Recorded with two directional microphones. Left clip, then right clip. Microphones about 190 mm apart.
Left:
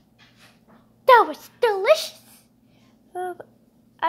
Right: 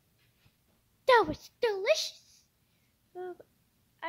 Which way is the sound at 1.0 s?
35° right (ahead or behind).